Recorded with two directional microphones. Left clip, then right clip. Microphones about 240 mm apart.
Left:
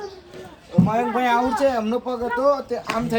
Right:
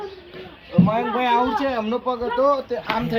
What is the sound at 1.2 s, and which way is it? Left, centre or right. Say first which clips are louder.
Speech: left 1 dB; left.